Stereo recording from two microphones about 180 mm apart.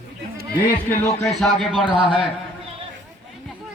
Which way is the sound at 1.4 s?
Centre (ahead or behind).